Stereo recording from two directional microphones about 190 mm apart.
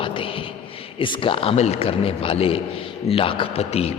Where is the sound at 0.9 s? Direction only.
25° left (ahead or behind).